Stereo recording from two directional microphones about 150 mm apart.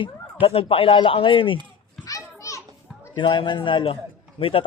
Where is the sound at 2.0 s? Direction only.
20° left (ahead or behind).